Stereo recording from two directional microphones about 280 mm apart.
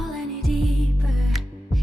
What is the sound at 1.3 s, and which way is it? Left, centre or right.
Music, centre.